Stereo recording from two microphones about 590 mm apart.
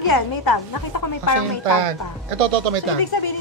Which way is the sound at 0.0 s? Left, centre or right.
Left.